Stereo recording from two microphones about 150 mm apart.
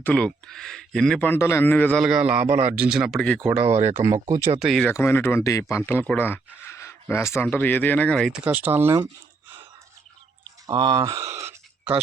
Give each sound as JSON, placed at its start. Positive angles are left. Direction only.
{"t": 0.0, "sound": "speech", "side_deg": 5}
{"t": 2.0, "sound": "speech", "side_deg": -5}
{"t": 3.5, "sound": "speech", "side_deg": -10}
{"t": 3.8, "sound": "speech", "side_deg": -50}
{"t": 4.0, "sound": "speech", "side_deg": -20}
{"t": 4.6, "sound": "speech", "side_deg": 0}
{"t": 4.9, "sound": "speech", "side_deg": 15}
{"t": 8.4, "sound": "speech", "side_deg": -10}
{"t": 10.7, "sound": "speech", "side_deg": -30}